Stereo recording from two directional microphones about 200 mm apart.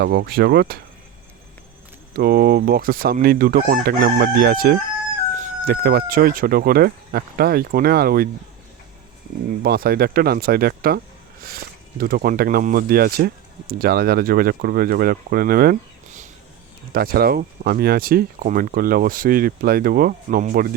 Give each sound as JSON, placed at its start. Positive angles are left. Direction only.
{"t": 0.0, "sound": "speech", "side_deg": -50}
{"t": 2.1, "sound": "speech", "side_deg": -50}
{"t": 9.6, "sound": "speech", "side_deg": -50}